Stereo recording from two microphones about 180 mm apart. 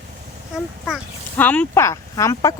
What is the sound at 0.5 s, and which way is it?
Speech, 5° right (ahead or behind).